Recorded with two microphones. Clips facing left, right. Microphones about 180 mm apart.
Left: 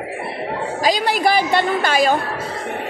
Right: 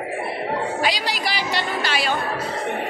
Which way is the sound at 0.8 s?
55° left (ahead or behind).